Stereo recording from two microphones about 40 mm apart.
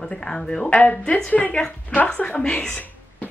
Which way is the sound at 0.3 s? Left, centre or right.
Left.